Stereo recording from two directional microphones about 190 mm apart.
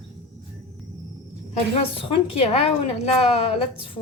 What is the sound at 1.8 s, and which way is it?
A woman's voice, 30° left (ahead or behind).